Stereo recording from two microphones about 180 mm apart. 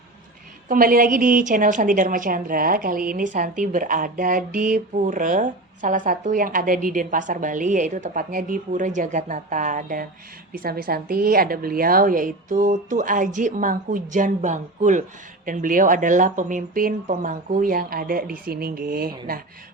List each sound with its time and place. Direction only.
0.7 s a woman's voice: 50° right (ahead or behind)